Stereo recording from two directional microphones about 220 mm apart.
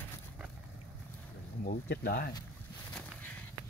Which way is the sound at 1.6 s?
45° left (ahead or behind).